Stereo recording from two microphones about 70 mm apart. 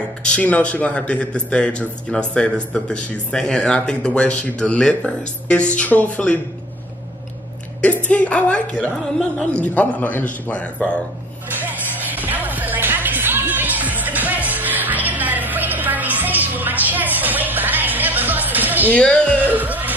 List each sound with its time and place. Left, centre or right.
0.3 s a man's voice: centre
7.8 s a man's voice: centre
11.6 s music: right
18.9 s a man's voice: centre
19.4 s music: right